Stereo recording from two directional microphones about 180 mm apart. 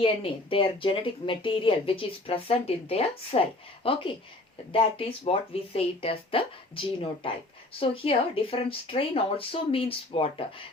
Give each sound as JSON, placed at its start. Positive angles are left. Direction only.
{"t": 0.0, "sound": "speech", "side_deg": 30}